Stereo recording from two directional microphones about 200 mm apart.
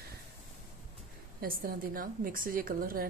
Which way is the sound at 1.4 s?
45° right (ahead or behind).